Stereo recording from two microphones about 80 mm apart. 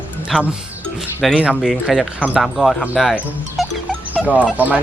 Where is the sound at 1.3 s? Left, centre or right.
Centre.